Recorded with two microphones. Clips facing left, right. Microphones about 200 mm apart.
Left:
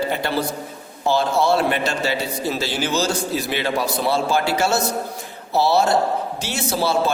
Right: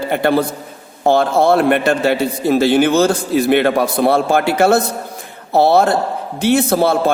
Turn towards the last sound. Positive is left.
turn(degrees=-55)  # may be behind; listen again after turning